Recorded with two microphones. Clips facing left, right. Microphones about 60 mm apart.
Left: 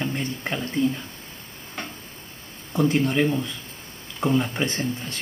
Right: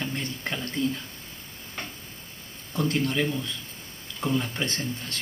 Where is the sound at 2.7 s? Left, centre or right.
Left.